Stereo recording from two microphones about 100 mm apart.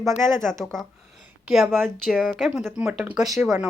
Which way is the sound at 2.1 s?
5° right (ahead or behind).